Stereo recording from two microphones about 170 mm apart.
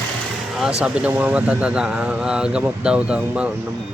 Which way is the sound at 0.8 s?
5° right (ahead or behind).